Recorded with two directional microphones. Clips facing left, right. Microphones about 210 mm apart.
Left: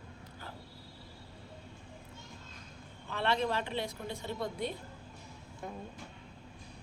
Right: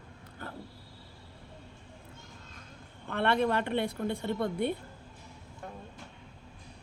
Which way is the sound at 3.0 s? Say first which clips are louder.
Right 4 dB; 60° right (ahead or behind).